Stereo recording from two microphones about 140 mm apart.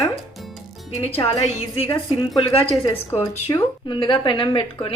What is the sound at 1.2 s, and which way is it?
A woman's voice, 50° left (ahead or behind).